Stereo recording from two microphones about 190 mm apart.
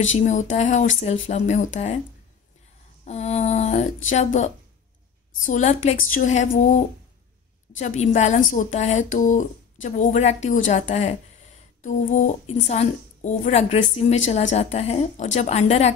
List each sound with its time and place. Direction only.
0.2 s a woman's voice: 40° left (ahead or behind)
3.1 s a sound: 35° left (ahead or behind)
4.1 s a woman's voice: 40° left (ahead or behind)
7.8 s a woman's voice: 40° left (ahead or behind)